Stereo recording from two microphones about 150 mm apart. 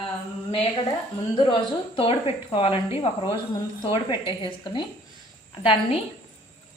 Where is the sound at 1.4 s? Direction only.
35° left (ahead or behind).